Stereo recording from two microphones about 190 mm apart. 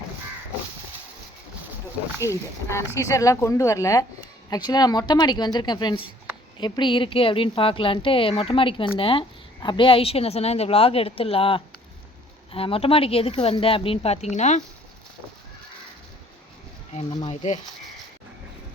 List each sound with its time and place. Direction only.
2.2 s a woman's voice: 15° left (ahead or behind); by 14.6 s 40° left (ahead or behind)
16.9 s a woman's voice: 25° left (ahead or behind)